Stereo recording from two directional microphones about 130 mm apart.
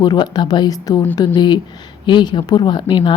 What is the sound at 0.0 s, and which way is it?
A woman's voice, 35° left (ahead or behind).